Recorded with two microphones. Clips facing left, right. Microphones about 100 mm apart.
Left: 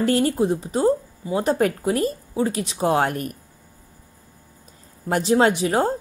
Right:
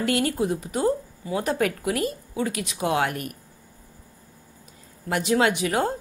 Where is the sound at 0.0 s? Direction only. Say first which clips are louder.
Left 4 dB; 35° left (ahead or behind).